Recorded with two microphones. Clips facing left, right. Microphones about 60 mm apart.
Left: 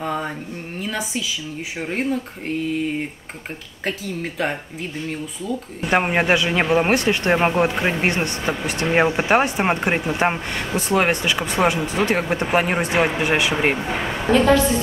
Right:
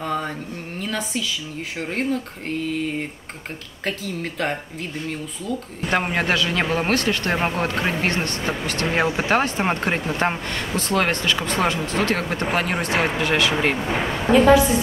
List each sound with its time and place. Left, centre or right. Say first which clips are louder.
0.0 s speech: even; centre
3.8 s speech: left 1 dB; centre
5.8 s speech: left 4 dB; centre
14.3 s a woman's voice: right 2 dB; centre